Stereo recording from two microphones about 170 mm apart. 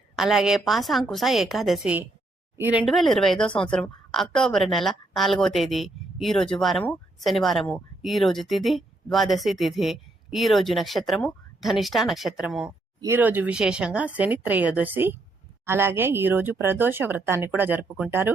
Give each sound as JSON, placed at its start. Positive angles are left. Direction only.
{"t": 0.2, "sound": "a woman's voice", "side_deg": 0}
{"t": 2.8, "sound": "a woman's voice", "side_deg": 0}